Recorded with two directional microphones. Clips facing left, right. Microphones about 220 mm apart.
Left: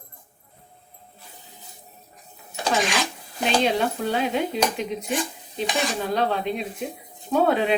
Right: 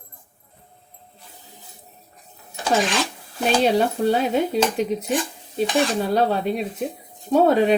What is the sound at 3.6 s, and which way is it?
A woman's voice, 40° right (ahead or behind).